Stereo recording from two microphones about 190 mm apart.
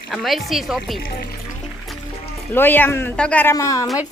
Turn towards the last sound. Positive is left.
turn(degrees=20)  # may be behind; listen again after turning